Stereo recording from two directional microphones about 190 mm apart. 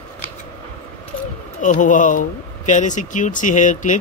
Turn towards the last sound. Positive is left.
turn(degrees=40)  # may be behind; listen again after turning